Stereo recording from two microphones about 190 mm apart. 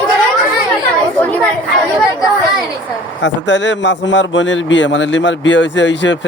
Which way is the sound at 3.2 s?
70° left (ahead or behind).